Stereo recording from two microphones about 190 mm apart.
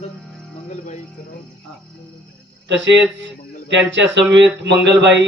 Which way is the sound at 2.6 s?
70° right (ahead or behind).